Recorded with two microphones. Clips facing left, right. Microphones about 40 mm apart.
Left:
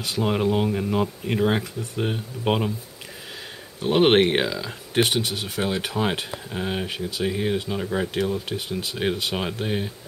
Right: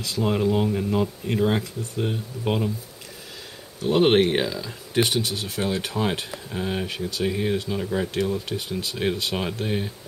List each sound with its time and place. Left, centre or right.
0.0 s speech: left
0.6 s speech: left
1.6 s speech: left
3.8 s speech: left
5.3 s speech: centre